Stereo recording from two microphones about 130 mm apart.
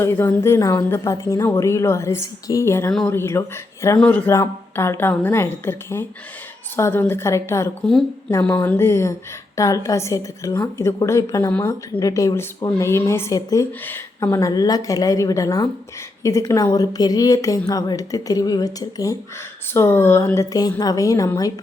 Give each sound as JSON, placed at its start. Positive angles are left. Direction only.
{"t": 0.0, "sound": "a woman's voice", "side_deg": 20}
{"t": 3.9, "sound": "speech", "side_deg": 10}
{"t": 4.3, "sound": "a woman's voice", "side_deg": 20}